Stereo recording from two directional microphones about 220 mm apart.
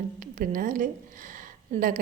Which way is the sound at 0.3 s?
40° right (ahead or behind).